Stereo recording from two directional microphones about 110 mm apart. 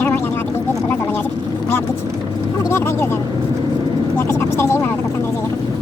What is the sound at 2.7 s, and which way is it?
Speech, 25° left (ahead or behind).